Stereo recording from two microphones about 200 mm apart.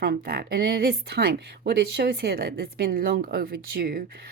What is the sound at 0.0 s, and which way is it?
A woman's voice, 50° right (ahead or behind).